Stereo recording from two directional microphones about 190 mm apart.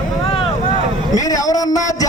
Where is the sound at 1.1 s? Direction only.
20° left (ahead or behind).